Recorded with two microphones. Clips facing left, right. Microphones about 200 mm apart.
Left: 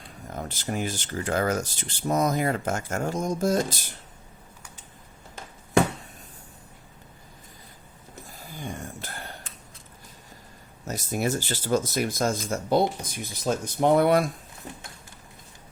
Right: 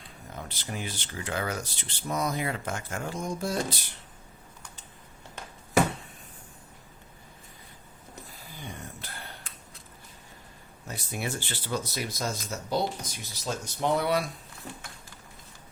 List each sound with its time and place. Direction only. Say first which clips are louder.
0.3 s speech: left 7 dB; 45° left (ahead or behind)
8.5 s a sound: left 6 dB; 45° left (ahead or behind)
10.8 s speech: left 7 dB; 40° left (ahead or behind)